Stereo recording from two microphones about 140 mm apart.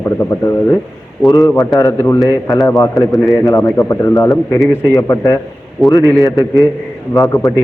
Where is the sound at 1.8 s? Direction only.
25° left (ahead or behind).